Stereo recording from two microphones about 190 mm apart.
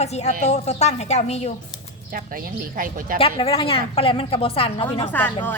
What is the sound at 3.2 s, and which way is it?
A woman's voice, 30° left (ahead or behind).